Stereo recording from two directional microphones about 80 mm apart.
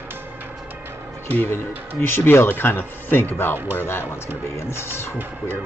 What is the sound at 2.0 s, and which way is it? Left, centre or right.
Speech, left.